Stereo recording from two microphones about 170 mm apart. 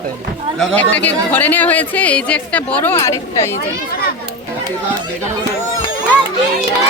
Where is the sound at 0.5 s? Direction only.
5° left (ahead or behind).